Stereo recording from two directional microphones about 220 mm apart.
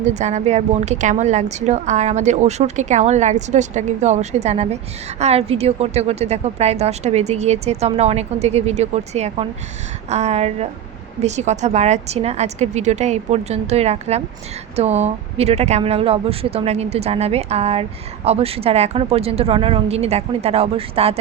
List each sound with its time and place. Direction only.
0.0 s a woman's voice: 30° right (ahead or behind)